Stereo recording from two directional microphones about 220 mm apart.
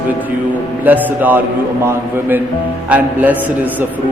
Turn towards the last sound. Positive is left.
turn(degrees=-5)  # may be behind; listen again after turning